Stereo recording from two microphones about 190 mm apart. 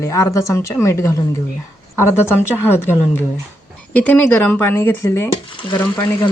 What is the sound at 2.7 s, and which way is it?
Speech, 15° left (ahead or behind).